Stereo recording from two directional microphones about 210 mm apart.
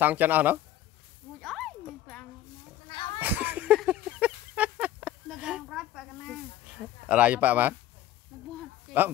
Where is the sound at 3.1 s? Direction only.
10° right (ahead or behind).